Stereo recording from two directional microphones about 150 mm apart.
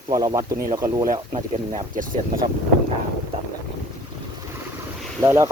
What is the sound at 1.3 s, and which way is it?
Speech, 55° right (ahead or behind).